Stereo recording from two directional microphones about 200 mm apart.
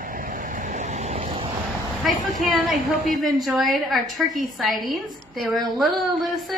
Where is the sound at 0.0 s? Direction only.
45° right (ahead or behind); by 1.5 s 30° right (ahead or behind).